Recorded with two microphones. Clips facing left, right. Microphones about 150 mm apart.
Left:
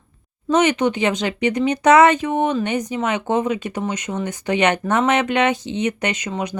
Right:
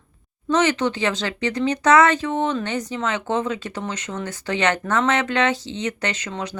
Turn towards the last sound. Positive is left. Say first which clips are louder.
# left 4 dB
turn(degrees=15)  # may be behind; listen again after turning